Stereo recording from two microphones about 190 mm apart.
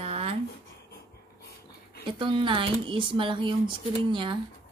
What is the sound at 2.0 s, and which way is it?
Speech, 25° right (ahead or behind).